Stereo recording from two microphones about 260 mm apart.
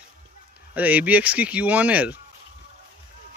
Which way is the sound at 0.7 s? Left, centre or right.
Centre.